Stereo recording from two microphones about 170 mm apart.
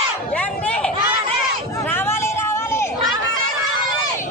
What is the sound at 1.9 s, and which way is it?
Hubbub, 15° left (ahead or behind).